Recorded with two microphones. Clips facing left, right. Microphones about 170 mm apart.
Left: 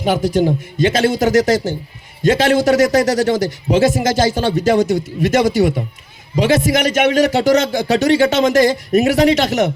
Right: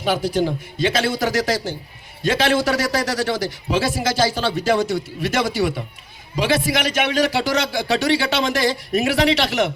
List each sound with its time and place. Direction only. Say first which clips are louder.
0.0 s a man's voice: left 5 dB; 45° left (ahead or behind)